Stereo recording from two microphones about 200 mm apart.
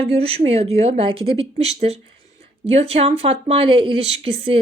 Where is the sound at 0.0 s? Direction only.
30° right (ahead or behind).